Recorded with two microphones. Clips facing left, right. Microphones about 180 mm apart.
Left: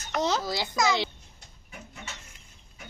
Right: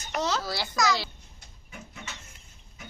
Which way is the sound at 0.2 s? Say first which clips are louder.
Left 2 dB; 20° left (ahead or behind).